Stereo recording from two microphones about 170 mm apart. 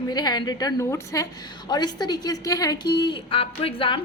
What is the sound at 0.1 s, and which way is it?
A woman's voice, 25° left (ahead or behind).